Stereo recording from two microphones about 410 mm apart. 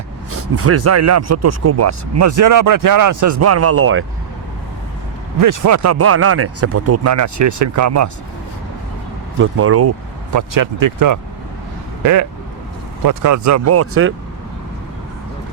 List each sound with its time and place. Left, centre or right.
0.3 s speech: right
5.4 s speech: right
9.4 s speech: right
10.3 s speech: right
13.1 s speech: right